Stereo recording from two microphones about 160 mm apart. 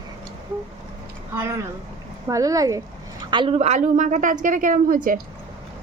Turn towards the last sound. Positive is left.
turn(degrees=-55)  # may be behind; listen again after turning